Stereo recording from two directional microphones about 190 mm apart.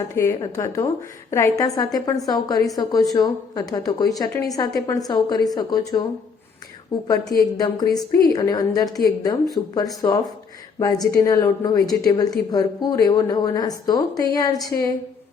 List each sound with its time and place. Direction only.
0.1 s a woman's voice: 15° left (ahead or behind)
7.1 s a woman's voice: 20° left (ahead or behind)